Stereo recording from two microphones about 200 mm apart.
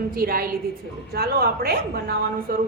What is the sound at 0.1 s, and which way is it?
A woman's voice, 45° right (ahead or behind).